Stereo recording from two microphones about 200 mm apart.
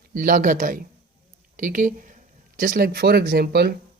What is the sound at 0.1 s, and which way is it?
Speech, 45° right (ahead or behind).